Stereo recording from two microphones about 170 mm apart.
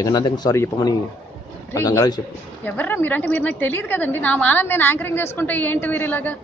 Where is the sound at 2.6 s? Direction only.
10° left (ahead or behind).